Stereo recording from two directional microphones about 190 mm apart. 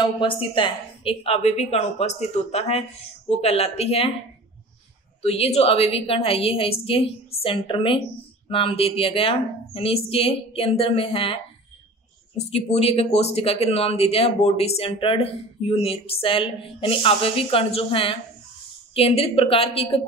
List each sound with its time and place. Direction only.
0.0 s speech: 25° left (ahead or behind)
5.2 s speech: 30° left (ahead or behind)
12.4 s speech: 35° left (ahead or behind)